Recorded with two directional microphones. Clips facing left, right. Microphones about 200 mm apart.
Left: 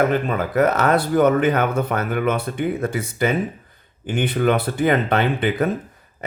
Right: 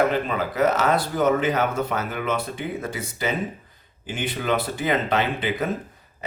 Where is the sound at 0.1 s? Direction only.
50° left (ahead or behind).